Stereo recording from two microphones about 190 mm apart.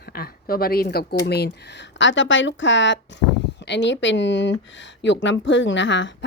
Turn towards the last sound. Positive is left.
turn(degrees=75)  # may be behind; listen again after turning